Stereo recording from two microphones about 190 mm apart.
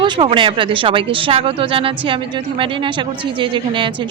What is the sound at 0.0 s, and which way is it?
Speech, 25° right (ahead or behind).